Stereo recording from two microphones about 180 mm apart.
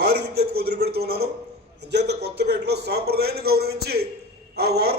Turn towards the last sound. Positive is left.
turn(degrees=-60)  # may be behind; listen again after turning